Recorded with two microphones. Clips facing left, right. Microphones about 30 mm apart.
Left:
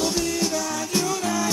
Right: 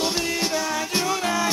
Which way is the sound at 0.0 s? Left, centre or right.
Right.